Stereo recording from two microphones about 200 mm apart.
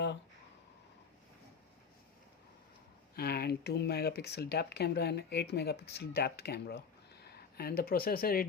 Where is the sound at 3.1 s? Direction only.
50° left (ahead or behind).